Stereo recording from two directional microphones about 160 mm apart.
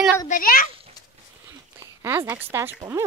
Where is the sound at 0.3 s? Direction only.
60° left (ahead or behind).